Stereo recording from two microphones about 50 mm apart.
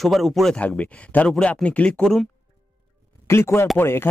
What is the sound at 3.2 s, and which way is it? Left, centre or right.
Speech, left.